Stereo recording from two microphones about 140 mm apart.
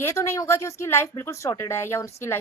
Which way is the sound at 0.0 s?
20° left (ahead or behind).